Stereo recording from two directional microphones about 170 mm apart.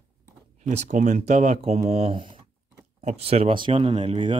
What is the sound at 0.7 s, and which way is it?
Speech, 45° right (ahead or behind).